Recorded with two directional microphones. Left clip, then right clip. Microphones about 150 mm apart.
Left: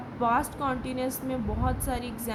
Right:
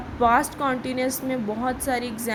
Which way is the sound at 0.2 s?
35° right (ahead or behind).